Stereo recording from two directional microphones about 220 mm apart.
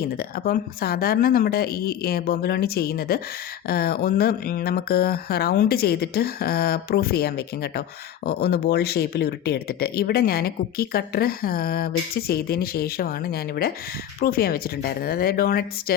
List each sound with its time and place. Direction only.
0.2 s speech: 40° left (ahead or behind)